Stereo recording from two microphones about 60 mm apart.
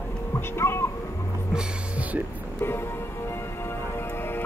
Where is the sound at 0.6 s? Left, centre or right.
Left.